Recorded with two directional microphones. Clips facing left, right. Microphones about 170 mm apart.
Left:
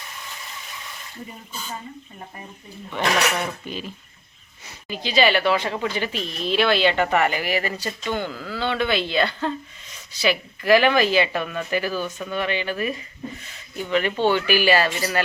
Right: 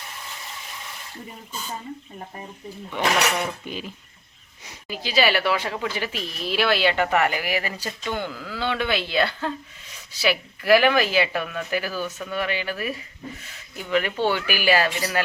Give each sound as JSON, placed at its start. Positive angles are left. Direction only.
{"t": 2.9, "sound": "speech", "side_deg": -10}
{"t": 12.0, "sound": "speech", "side_deg": 10}
{"t": 12.3, "sound": "speech", "side_deg": -5}